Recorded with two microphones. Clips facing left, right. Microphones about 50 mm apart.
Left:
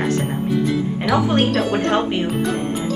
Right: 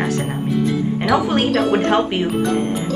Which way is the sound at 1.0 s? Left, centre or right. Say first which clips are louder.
Even; centre.